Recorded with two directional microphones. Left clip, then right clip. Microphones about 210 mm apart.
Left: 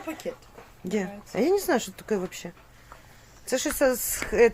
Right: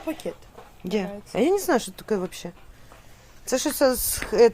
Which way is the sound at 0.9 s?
15° right (ahead or behind).